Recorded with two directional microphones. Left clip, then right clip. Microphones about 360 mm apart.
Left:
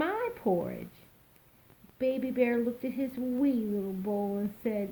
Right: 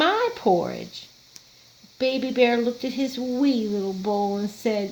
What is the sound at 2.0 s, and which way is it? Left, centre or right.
Speech, right.